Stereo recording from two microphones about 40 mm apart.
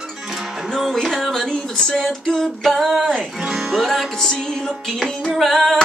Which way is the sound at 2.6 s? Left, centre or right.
Centre.